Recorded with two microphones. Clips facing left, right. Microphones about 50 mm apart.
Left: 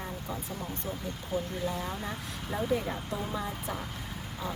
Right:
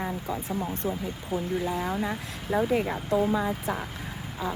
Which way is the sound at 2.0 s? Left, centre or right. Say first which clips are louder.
Right 6 dB; right.